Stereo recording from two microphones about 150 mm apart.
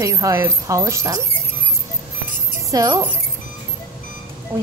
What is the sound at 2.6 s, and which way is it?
Speech, 25° right (ahead or behind).